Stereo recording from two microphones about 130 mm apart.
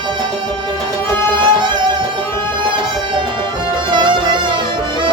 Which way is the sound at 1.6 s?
35° right (ahead or behind).